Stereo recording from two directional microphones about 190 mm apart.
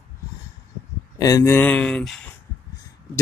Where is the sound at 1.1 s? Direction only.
20° left (ahead or behind).